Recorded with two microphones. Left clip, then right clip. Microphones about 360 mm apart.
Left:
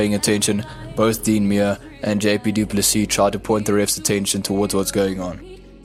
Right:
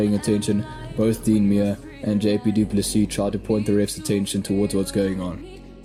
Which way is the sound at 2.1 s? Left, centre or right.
Centre.